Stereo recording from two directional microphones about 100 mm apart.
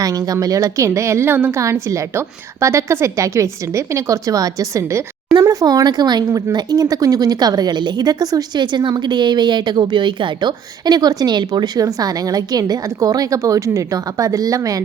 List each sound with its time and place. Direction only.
0.0 s a woman's voice: 35° right (ahead or behind)